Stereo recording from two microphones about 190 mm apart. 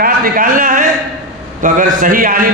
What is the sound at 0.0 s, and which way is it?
A man's voice, 45° right (ahead or behind).